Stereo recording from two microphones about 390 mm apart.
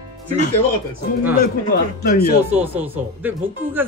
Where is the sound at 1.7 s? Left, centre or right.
Left.